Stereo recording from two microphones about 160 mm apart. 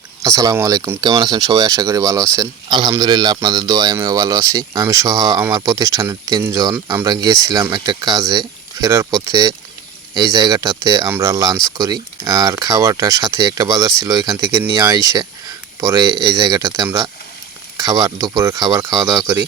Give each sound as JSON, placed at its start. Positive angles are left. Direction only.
{"t": 0.2, "sound": "speech", "side_deg": -20}